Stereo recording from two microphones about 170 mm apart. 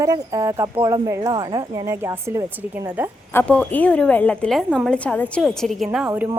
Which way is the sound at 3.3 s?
5° left (ahead or behind).